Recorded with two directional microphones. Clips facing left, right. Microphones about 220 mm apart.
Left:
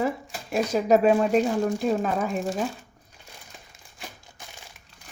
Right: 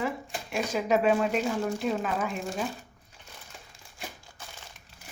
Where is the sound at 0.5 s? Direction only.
40° left (ahead or behind).